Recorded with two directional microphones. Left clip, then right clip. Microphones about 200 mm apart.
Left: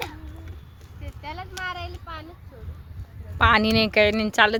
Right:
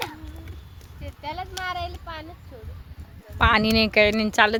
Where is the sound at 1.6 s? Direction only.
45° right (ahead or behind).